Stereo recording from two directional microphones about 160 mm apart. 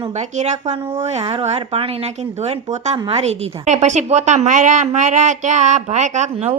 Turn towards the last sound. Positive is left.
turn(degrees=-45)  # may be behind; listen again after turning